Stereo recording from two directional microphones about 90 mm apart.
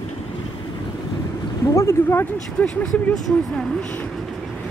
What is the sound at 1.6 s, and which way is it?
Speech, 35° left (ahead or behind).